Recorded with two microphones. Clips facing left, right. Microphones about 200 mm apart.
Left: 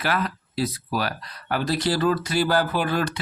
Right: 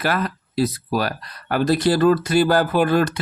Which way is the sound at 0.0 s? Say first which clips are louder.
Right 3 dB; 45° right (ahead or behind).